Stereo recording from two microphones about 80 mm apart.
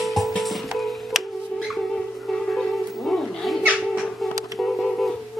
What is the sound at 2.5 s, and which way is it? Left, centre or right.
Music, centre.